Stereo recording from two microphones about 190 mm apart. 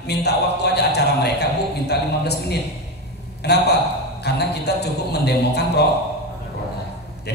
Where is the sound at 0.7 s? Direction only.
60° left (ahead or behind).